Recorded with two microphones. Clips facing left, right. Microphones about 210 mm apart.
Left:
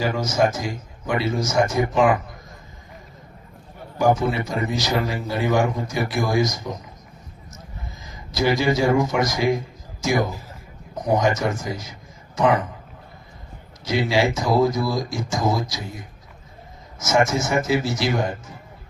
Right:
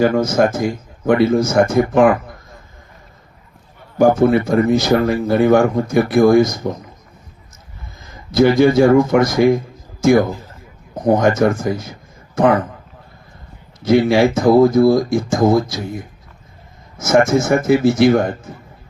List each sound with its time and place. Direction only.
0.0 s a man's voice: 55° right (ahead or behind)
3.9 s a man's voice: 55° right (ahead or behind)
8.3 s a man's voice: 55° right (ahead or behind)
13.8 s a man's voice: 55° right (ahead or behind)